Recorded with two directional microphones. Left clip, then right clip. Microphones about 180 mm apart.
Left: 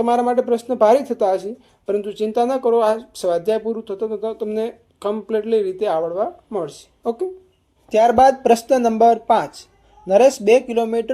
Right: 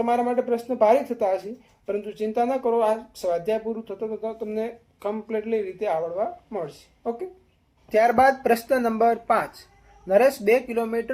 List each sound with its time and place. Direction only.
0.0 s speech: 50° left (ahead or behind)
7.9 s speech: 30° left (ahead or behind)